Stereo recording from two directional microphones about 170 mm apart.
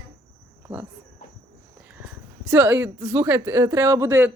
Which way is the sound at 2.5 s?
10° right (ahead or behind).